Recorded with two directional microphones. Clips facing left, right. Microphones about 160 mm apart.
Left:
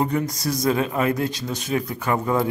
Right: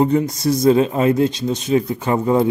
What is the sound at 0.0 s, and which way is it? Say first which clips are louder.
Speech: right 7 dB; 25° right (ahead or behind).